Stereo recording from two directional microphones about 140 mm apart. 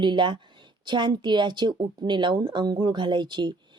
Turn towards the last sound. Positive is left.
turn(degrees=-30)  # may be behind; listen again after turning